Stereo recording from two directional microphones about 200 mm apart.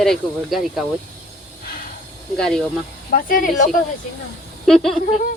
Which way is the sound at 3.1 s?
45° left (ahead or behind).